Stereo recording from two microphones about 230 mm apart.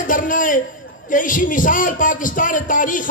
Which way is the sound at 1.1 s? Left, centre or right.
Left.